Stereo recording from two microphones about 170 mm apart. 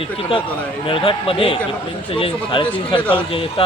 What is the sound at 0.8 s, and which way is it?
Speech, 30° left (ahead or behind).